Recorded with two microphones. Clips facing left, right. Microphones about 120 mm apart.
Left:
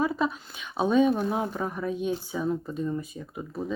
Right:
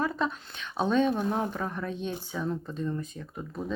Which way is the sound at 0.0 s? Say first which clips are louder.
Left 3 dB; 10° left (ahead or behind).